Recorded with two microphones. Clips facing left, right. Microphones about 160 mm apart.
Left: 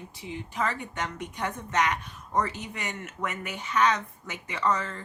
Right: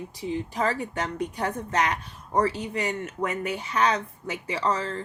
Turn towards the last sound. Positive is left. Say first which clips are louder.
# right 2 dB
turn(degrees=-30)  # may be behind; listen again after turning